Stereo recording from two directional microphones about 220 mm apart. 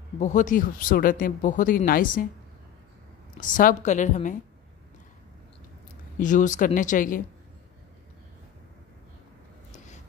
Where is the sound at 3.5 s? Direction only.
35° left (ahead or behind).